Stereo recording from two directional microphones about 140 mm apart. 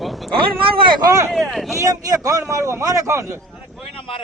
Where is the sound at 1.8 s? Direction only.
25° right (ahead or behind).